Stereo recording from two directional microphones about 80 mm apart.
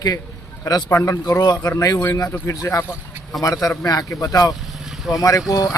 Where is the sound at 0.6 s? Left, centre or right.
Left.